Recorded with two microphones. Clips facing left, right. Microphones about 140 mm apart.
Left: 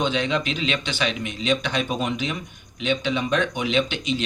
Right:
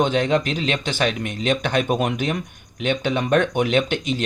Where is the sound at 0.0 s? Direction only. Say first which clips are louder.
Right 4 dB; 45° right (ahead or behind).